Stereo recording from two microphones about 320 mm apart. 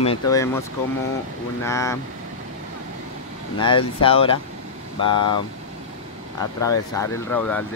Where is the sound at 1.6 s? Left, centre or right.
Centre.